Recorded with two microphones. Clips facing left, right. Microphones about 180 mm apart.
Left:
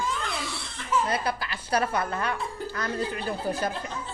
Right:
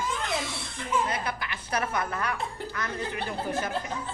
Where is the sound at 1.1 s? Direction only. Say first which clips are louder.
Left 4 dB; 35° left (ahead or behind).